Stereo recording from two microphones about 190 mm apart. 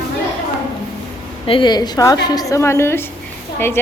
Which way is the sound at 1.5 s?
25° left (ahead or behind).